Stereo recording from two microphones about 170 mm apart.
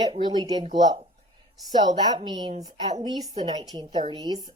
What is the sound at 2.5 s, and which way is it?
Speech, 40° right (ahead or behind).